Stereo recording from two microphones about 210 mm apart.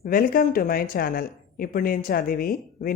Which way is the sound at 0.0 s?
45° left (ahead or behind).